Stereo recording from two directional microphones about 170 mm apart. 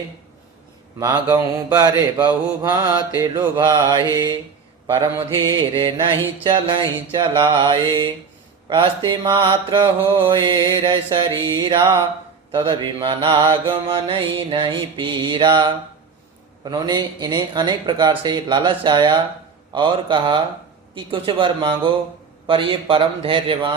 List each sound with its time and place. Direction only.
0.9 s mantra: 20° right (ahead or behind)
4.9 s a man's voice: 30° right (ahead or behind)
6.4 s mantra: 30° right (ahead or behind)
8.6 s a man's voice: 30° right (ahead or behind)
9.0 s mantra: 30° right (ahead or behind)
20.9 s a man's voice: 30° right (ahead or behind)